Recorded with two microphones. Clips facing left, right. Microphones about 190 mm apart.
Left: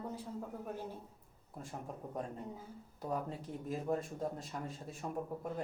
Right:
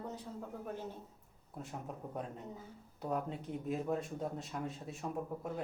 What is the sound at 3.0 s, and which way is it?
A woman's voice, centre (ahead or behind).